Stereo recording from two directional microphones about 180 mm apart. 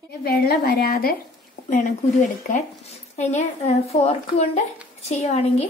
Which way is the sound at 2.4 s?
40° left (ahead or behind).